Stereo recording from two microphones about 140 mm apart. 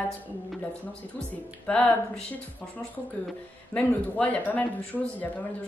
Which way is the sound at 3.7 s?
10° left (ahead or behind).